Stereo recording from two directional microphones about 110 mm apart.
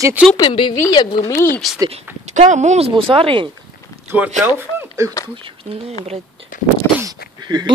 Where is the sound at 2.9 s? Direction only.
55° right (ahead or behind).